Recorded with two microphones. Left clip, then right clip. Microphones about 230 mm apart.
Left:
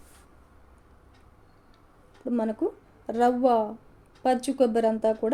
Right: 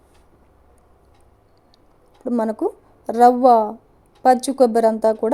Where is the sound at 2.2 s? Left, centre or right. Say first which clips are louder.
Right 7 dB; right.